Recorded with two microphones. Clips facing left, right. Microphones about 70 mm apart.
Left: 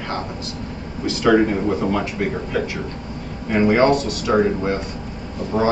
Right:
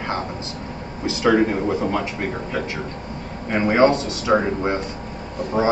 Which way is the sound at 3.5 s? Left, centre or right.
Right.